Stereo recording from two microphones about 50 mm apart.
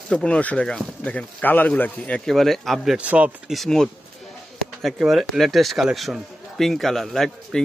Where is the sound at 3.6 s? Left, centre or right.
Centre.